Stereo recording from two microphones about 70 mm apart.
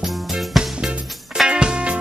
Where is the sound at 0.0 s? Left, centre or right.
Centre.